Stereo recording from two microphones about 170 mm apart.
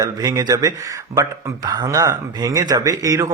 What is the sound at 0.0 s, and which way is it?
Speech, 20° right (ahead or behind).